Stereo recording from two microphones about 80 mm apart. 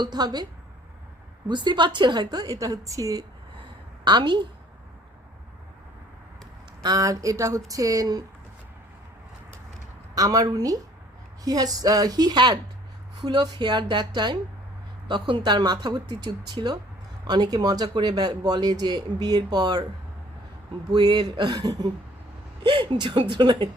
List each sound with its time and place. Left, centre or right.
0.0 s speech: right
1.5 s speech: right
4.0 s a woman's voice: right
6.8 s a woman's voice: right
10.2 s a woman's voice: right
15.1 s a woman's voice: right
20.9 s a woman's voice: right
22.6 s a woman's voice: right